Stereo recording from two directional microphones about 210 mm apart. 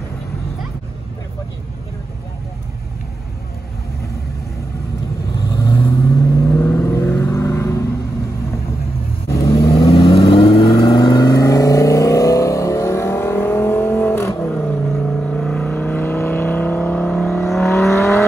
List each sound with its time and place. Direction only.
5.5 s vehicle: 20° left (ahead or behind)
9.6 s vehicle: 25° left (ahead or behind); by 18.1 s centre (ahead or behind)